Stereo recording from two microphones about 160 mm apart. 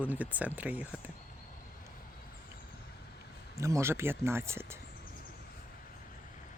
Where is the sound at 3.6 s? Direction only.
20° right (ahead or behind).